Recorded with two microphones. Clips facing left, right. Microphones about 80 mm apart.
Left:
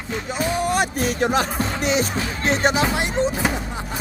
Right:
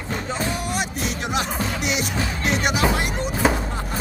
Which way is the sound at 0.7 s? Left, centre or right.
Left.